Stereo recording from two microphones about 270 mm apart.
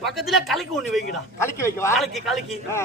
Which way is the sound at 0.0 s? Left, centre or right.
Centre.